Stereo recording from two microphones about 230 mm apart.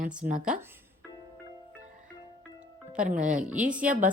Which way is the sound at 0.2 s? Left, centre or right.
Right.